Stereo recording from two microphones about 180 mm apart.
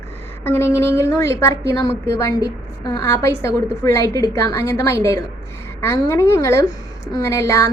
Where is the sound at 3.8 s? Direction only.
20° left (ahead or behind).